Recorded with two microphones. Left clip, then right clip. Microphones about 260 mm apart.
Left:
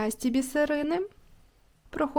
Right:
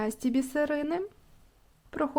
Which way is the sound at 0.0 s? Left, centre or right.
Centre.